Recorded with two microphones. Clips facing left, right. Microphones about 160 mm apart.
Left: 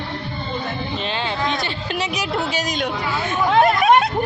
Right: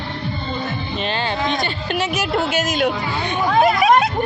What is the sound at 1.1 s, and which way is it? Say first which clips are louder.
Speech: right 2 dB; centre (ahead or behind).